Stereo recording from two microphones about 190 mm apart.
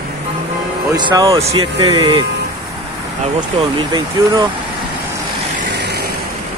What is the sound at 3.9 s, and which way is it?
Speech, 25° right (ahead or behind).